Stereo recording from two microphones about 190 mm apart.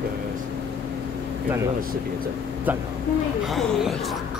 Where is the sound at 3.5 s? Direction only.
Centre (ahead or behind).